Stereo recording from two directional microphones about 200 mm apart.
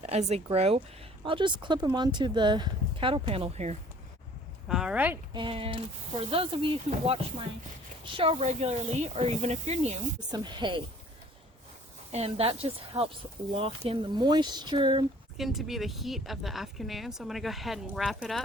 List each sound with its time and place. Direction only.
0.0 s speech: 30° right (ahead or behind)
4.7 s speech: 5° right (ahead or behind)
5.3 s speech: 25° right (ahead or behind)
10.3 s speech: 25° right (ahead or behind)
12.1 s speech: 30° right (ahead or behind)
15.4 s speech: centre (ahead or behind)